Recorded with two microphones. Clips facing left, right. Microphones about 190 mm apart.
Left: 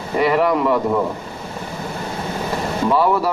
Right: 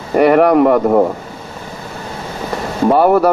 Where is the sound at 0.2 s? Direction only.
60° right (ahead or behind).